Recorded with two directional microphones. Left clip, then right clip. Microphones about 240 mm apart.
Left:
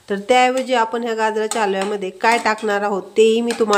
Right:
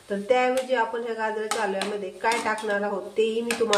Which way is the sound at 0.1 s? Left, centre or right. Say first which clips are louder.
Left 7 dB; left.